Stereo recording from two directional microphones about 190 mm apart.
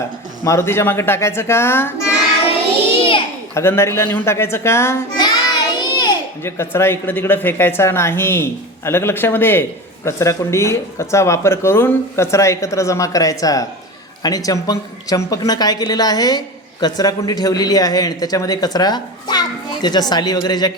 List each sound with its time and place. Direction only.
0.4 s speech: 15° left (ahead or behind)
3.5 s a child's voice: 15° left (ahead or behind)